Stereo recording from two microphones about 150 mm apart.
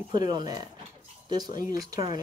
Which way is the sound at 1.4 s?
65° left (ahead or behind).